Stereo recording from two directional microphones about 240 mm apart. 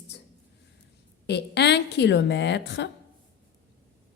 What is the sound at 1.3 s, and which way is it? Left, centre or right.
A woman's voice, left.